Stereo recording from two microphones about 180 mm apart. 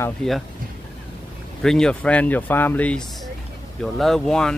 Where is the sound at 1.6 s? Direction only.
5° left (ahead or behind).